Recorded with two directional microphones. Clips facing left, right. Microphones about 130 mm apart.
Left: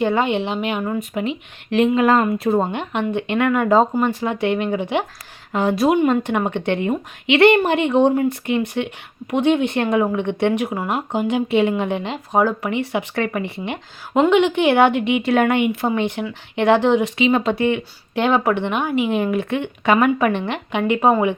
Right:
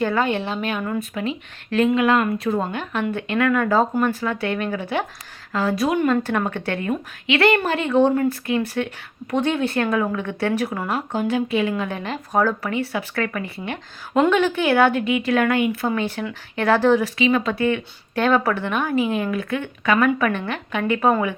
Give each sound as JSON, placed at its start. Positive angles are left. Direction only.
{"t": 0.0, "sound": "speech", "side_deg": 20}